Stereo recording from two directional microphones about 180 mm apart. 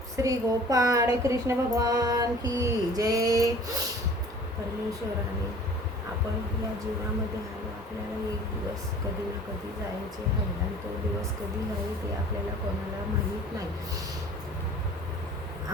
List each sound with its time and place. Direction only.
0.2 s a woman's voice: 20° right (ahead or behind)